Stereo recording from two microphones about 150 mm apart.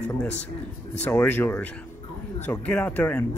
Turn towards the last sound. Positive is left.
turn(degrees=10)  # may be behind; listen again after turning